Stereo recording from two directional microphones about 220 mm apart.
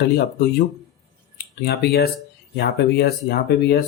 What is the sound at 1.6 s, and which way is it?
Speech, 45° left (ahead or behind).